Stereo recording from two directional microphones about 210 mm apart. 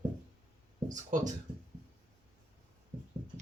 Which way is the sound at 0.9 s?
35° right (ahead or behind).